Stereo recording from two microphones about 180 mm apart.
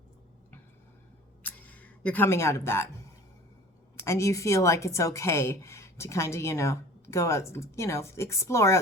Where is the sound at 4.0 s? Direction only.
15° left (ahead or behind).